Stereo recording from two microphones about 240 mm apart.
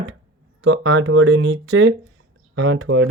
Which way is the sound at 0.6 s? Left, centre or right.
Right.